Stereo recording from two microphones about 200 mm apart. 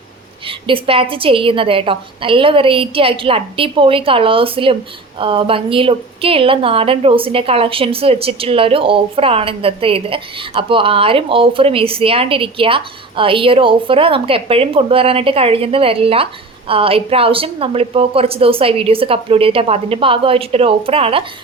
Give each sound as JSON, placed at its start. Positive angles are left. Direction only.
{"t": 0.4, "sound": "a woman's voice", "side_deg": -25}